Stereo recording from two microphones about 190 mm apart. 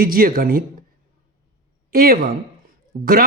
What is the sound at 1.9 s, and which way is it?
A man's voice, 50° right (ahead or behind).